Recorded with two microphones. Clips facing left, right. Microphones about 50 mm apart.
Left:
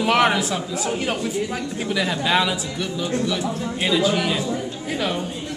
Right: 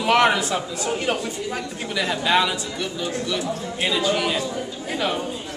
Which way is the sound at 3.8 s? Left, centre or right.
Centre.